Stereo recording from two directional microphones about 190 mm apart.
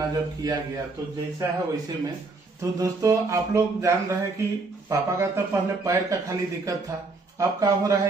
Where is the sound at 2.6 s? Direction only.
15° right (ahead or behind).